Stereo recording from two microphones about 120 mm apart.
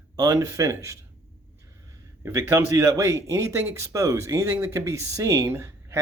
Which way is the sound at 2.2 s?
25° right (ahead or behind).